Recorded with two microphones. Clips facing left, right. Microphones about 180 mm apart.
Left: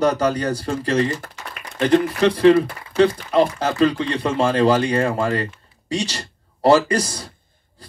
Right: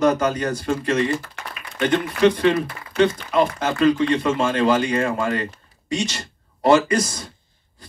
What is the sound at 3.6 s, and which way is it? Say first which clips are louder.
Speech: right 1 dB; 35° left (ahead or behind).